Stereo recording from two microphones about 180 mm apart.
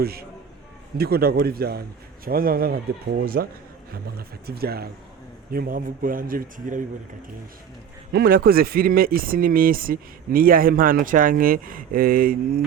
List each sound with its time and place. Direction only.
0.0 s speech: 60° right (ahead or behind)
8.1 s speech: 55° right (ahead or behind)